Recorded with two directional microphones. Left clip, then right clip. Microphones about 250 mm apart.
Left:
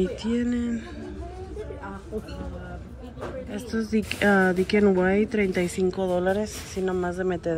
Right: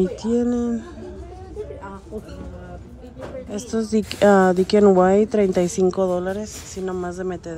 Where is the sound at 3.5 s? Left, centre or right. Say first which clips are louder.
Right 7 dB; centre.